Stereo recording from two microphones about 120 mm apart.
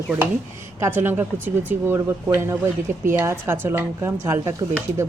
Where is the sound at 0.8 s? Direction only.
20° right (ahead or behind).